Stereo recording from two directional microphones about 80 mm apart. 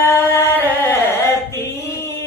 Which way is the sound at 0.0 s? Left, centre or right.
Left.